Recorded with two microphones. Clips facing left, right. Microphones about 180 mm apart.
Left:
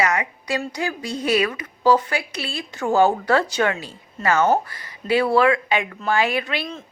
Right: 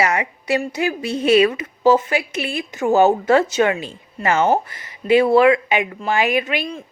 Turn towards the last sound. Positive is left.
turn(degrees=-15)  # may be behind; listen again after turning